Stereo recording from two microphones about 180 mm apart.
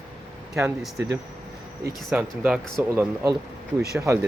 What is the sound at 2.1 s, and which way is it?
Speech, 5° right (ahead or behind).